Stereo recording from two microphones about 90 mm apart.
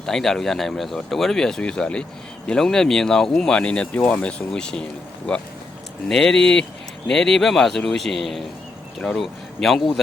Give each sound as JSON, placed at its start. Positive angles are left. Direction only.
{"t": 0.0, "sound": "speech", "side_deg": 5}